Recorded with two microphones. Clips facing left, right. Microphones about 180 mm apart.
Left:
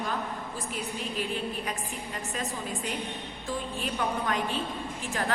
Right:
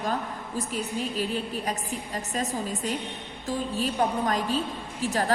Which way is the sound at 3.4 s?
40° right (ahead or behind).